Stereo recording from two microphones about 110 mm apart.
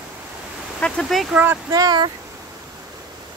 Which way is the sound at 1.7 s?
40° right (ahead or behind).